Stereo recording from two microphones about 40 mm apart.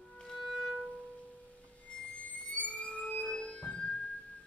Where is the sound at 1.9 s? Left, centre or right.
Left.